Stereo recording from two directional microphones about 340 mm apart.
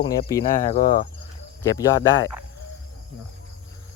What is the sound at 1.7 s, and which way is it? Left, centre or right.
Speech, centre.